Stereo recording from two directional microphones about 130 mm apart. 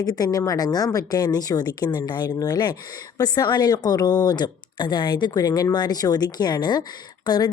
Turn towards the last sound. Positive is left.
turn(degrees=35)  # may be behind; listen again after turning